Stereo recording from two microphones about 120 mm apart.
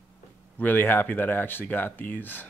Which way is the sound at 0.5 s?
15° left (ahead or behind).